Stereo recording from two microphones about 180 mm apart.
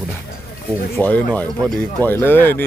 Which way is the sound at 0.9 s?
10° left (ahead or behind).